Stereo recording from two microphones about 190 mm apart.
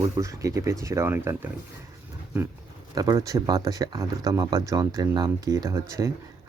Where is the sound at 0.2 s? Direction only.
15° right (ahead or behind).